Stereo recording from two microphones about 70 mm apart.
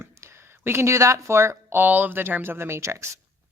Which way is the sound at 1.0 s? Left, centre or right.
Right.